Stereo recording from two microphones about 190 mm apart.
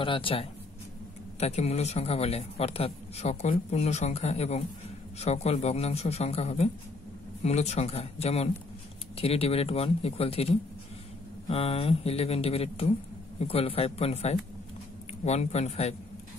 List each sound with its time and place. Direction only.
0.0 s a man's voice: 25° left (ahead or behind)